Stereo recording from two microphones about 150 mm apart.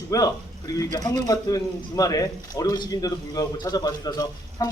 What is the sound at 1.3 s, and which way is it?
A man's voice, 25° left (ahead or behind).